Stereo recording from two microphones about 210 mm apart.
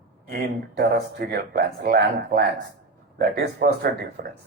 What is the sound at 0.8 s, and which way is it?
Speech, 45° right (ahead or behind).